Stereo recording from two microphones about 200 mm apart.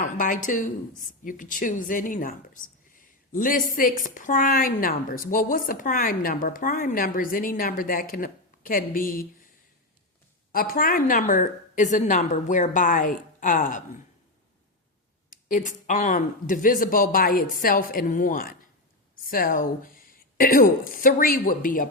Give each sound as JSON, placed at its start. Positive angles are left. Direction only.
{"t": 0.2, "sound": "a woman's voice", "side_deg": 40}
{"t": 10.5, "sound": "a woman's voice", "side_deg": 45}
{"t": 15.4, "sound": "a woman's voice", "side_deg": 40}